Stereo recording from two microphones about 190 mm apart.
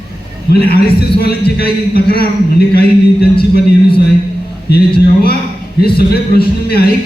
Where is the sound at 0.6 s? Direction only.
55° left (ahead or behind).